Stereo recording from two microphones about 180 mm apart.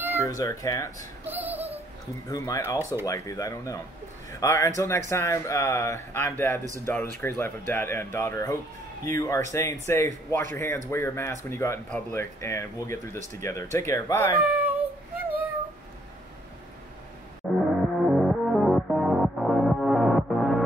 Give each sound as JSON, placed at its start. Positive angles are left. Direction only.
{"t": 0.2, "sound": "speech", "side_deg": 15}
{"t": 1.2, "sound": "a sound", "side_deg": -10}
{"t": 2.2, "sound": "speech", "side_deg": 20}
{"t": 14.4, "sound": "child singing", "side_deg": -10}
{"t": 17.4, "sound": "music", "side_deg": 5}